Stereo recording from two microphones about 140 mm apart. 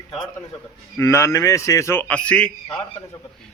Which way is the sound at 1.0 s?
20° left (ahead or behind).